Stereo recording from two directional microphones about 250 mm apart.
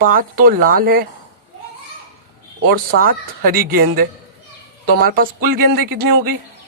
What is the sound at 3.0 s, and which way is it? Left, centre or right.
A woman's voice, right.